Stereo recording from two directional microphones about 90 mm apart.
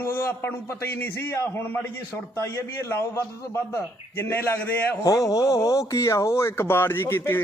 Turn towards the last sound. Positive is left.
turn(degrees=25)  # may be behind; listen again after turning